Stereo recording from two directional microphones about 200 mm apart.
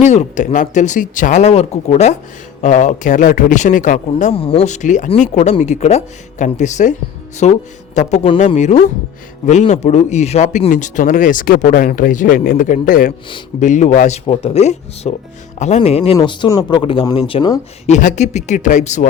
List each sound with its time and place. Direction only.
0.0 s speech: 35° left (ahead or behind)
17.8 s speech: 35° left (ahead or behind)